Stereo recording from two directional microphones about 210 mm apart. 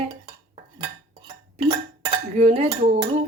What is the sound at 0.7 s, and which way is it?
Cutlery, 15° right (ahead or behind).